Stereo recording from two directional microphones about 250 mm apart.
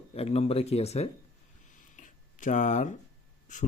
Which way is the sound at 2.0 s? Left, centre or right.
Left.